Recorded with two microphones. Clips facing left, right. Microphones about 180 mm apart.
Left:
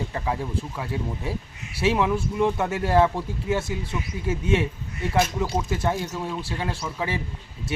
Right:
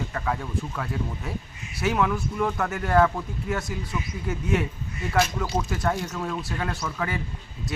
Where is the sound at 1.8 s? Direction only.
25° left (ahead or behind).